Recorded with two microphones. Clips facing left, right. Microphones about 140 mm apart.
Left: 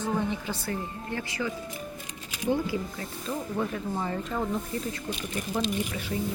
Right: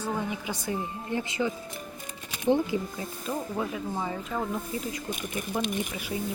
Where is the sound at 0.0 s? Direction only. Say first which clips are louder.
Left 2 dB; 10° right (ahead or behind).